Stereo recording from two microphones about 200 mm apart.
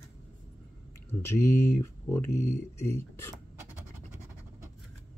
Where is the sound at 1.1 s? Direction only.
10° left (ahead or behind).